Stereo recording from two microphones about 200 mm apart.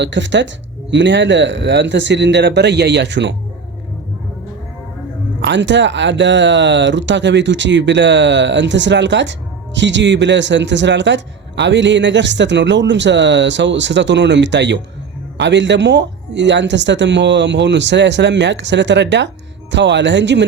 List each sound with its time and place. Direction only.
0.0 s a man's voice: 65° right (ahead or behind)
5.4 s a man's voice: 65° right (ahead or behind)